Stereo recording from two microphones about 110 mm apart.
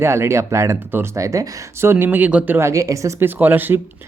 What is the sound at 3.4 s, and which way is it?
Speech, 15° right (ahead or behind).